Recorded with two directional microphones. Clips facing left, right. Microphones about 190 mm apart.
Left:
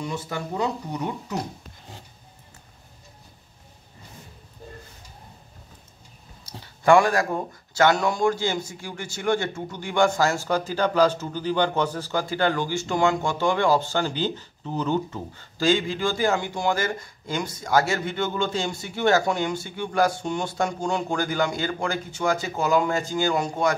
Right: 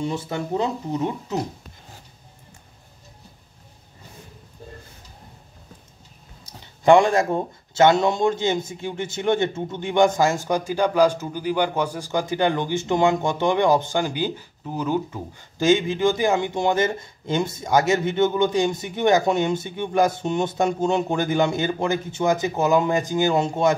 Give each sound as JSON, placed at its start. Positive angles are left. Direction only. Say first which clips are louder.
{"t": 0.0, "sound": "speech", "louder": "right 4 dB", "side_deg": -30}
{"t": 6.6, "sound": "speech", "louder": "right 3 dB", "side_deg": -20}